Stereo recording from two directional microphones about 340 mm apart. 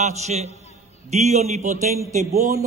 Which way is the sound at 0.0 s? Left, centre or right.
Centre.